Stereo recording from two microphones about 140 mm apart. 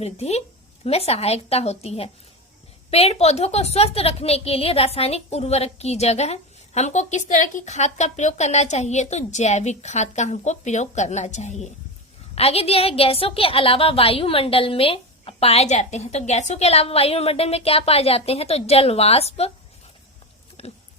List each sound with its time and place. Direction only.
0.0 s a woman's voice: 50° left (ahead or behind)
12.3 s a woman's voice: 45° left (ahead or behind)
20.6 s oink: 50° left (ahead or behind)